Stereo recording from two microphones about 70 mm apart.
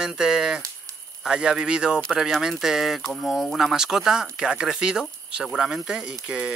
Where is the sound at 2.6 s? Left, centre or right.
Centre.